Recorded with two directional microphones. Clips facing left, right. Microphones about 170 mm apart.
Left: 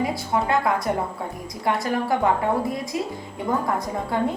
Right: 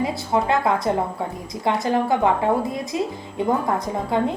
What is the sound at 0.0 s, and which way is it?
A woman's voice, 25° right (ahead or behind).